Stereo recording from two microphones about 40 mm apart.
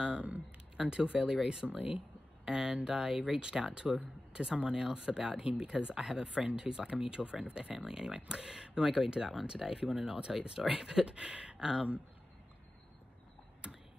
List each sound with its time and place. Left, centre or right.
0.0 s speech: right
1.7 s speech: right
2.4 s speech: right
13.6 s a sound: right